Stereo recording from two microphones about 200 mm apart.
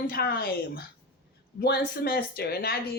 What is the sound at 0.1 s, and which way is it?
Speech, 50° left (ahead or behind).